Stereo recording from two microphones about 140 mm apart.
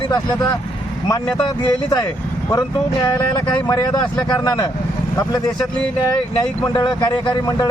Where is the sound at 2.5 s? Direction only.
30° left (ahead or behind).